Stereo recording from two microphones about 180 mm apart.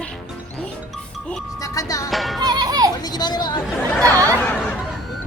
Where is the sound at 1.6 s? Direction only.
20° left (ahead or behind).